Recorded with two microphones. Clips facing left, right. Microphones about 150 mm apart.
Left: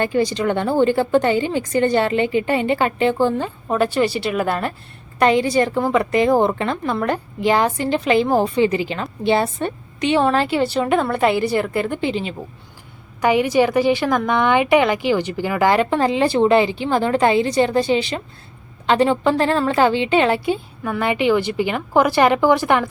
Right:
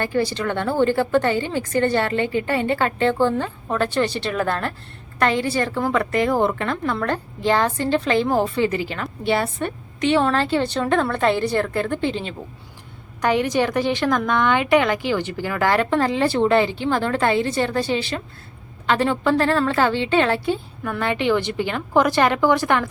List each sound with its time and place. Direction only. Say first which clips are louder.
0.0 s a woman's voice: left 3 dB; 15° left (ahead or behind)